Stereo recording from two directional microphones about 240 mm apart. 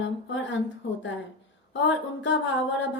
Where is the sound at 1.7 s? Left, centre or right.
Left.